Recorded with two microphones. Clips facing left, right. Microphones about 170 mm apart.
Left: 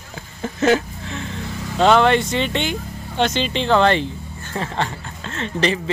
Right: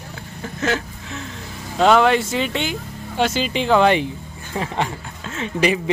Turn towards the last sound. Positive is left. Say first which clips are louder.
# right 1 dB
turn(degrees=-10)  # may be behind; listen again after turning